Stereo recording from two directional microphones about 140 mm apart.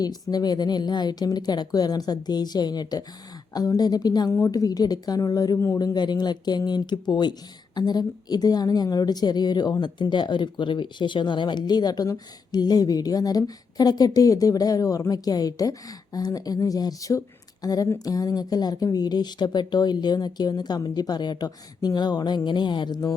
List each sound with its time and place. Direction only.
0.0 s a woman's voice: 30° left (ahead or behind)